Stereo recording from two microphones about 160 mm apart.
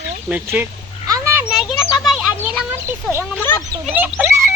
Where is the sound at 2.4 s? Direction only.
10° right (ahead or behind).